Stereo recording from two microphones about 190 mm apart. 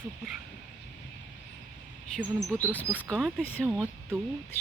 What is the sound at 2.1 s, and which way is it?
Speech, 5° left (ahead or behind).